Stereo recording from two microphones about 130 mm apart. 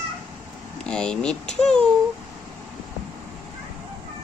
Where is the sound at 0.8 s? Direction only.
5° left (ahead or behind).